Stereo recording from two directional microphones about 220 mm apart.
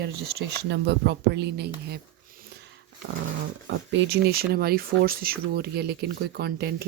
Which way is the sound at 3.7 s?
50° right (ahead or behind).